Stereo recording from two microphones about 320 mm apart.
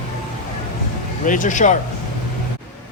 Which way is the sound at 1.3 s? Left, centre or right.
Left.